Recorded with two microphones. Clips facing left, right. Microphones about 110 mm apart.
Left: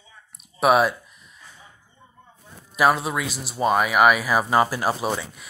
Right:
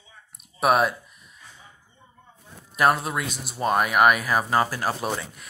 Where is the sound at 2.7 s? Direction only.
5° left (ahead or behind).